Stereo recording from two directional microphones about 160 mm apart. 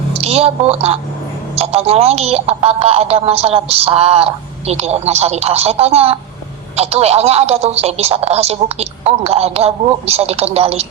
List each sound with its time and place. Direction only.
0.1 s a woman's voice: 40° right (ahead or behind)